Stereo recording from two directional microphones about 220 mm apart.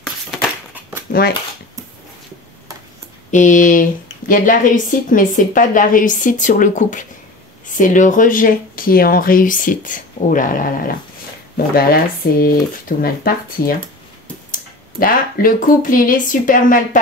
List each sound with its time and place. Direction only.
1.1 s speech: 35° left (ahead or behind)
3.3 s speech: 35° left (ahead or behind)